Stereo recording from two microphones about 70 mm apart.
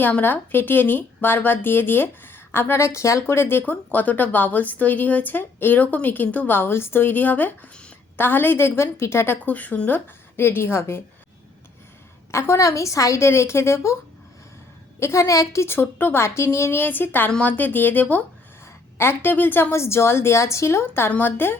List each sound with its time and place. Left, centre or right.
0.0 s speech: left
3.7 s speech: left
9.4 s speech: left
12.3 s speech: left
14.9 s a woman's voice: left
15.6 s speech: left